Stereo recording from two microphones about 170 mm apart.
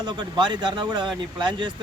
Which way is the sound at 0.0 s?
25° right (ahead or behind).